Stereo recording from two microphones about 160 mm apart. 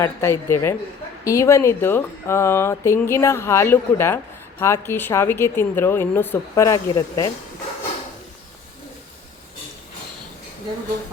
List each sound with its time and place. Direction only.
0.0 s speech: 15° left (ahead or behind)